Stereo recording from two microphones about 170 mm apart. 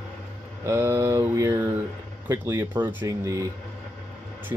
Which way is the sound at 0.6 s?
15° right (ahead or behind).